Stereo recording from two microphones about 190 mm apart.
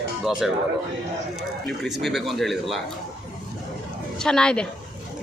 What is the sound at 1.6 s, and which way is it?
Speech, centre (ahead or behind).